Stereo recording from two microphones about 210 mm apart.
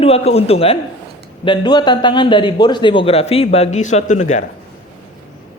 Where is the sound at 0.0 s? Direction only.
30° left (ahead or behind).